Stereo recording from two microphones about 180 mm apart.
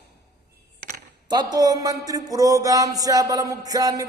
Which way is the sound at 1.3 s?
20° right (ahead or behind).